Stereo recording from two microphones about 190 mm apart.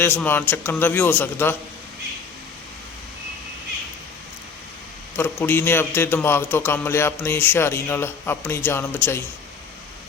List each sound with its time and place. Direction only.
0.0 s a man's voice: 10° left (ahead or behind)
5.1 s a man's voice: 10° left (ahead or behind)